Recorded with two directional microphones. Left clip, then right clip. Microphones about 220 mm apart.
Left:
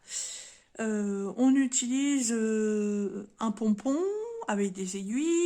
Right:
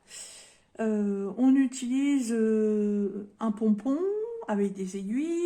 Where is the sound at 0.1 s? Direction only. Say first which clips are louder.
Left 7 dB; 40° left (ahead or behind).